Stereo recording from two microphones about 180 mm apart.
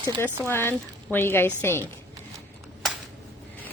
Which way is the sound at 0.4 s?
10° left (ahead or behind).